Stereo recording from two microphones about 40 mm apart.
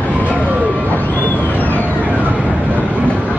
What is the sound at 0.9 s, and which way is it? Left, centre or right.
Vehicle, left.